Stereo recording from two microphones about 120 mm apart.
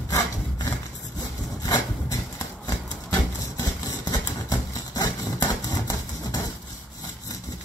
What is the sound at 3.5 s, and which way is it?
Vehicle, 30° left (ahead or behind).